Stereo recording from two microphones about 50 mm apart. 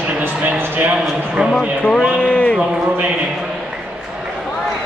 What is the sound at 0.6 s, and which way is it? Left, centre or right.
Speech, right.